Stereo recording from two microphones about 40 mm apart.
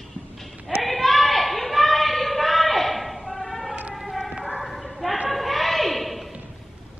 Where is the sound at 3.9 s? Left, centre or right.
Centre.